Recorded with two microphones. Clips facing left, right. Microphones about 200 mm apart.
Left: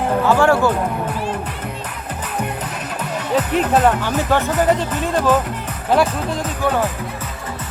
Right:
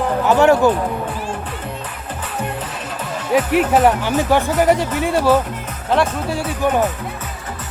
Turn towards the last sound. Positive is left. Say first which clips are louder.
# right 2 dB
turn(degrees=-15)  # may be behind; listen again after turning